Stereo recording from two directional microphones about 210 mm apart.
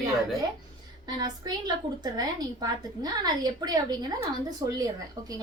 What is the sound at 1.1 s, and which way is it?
A woman's voice, 20° right (ahead or behind).